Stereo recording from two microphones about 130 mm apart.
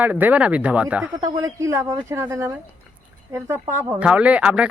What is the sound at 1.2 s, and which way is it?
Speech, 25° right (ahead or behind).